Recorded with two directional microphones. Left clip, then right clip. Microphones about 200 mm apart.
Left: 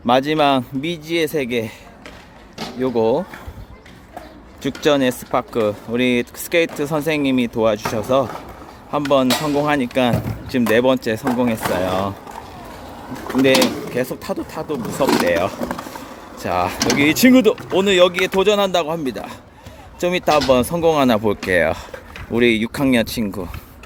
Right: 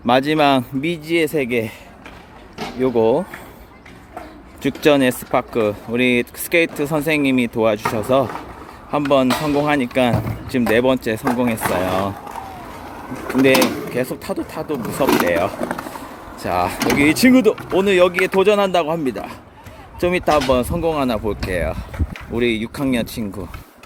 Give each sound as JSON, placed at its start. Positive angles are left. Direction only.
{"t": 0.0, "sound": "a man's voice", "side_deg": -5}
{"t": 2.8, "sound": "a man's voice", "side_deg": -10}
{"t": 4.8, "sound": "a man's voice", "side_deg": -10}
{"t": 13.2, "sound": "a man's voice", "side_deg": 0}
{"t": 20.2, "sound": "speech", "side_deg": 10}